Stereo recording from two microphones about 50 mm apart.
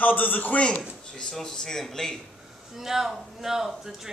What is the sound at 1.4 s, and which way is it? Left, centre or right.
Speech, centre.